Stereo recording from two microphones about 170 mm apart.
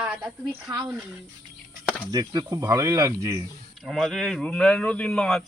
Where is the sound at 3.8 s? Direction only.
Centre (ahead or behind).